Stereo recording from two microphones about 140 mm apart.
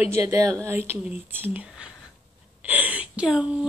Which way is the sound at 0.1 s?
20° right (ahead or behind).